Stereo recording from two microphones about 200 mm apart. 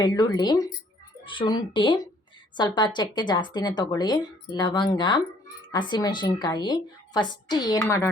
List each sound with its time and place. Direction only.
0.0 s a woman's voice: 20° left (ahead or behind)